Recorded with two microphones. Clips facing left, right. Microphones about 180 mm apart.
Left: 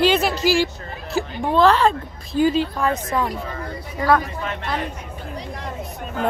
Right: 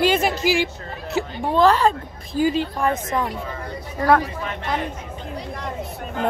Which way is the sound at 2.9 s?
20° right (ahead or behind).